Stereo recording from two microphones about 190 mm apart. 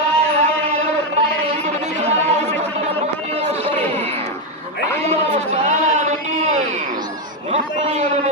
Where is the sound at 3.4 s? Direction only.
30° right (ahead or behind).